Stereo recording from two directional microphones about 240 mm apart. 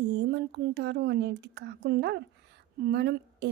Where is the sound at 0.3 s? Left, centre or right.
Right.